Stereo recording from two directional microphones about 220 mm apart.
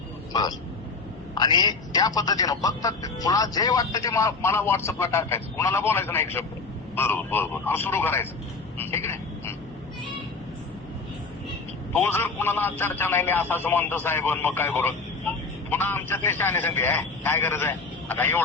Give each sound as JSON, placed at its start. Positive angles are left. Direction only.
{"t": 1.4, "sound": "a man's voice", "side_deg": 20}
{"t": 8.8, "sound": "a sound", "side_deg": 10}
{"t": 11.9, "sound": "a man's voice", "side_deg": 10}